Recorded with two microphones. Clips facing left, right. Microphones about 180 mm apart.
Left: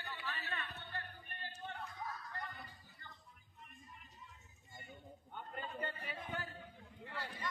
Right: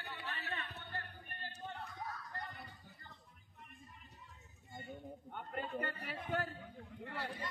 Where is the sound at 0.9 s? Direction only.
45° right (ahead or behind).